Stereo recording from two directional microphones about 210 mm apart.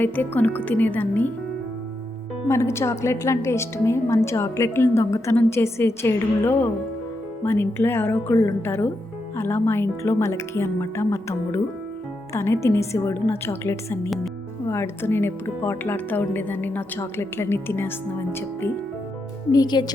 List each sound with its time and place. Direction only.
0.0 s speech: 10° left (ahead or behind)
2.5 s speech: 15° left (ahead or behind)